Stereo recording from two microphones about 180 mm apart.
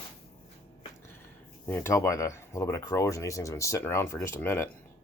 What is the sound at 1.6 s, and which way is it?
Speech, 15° left (ahead or behind).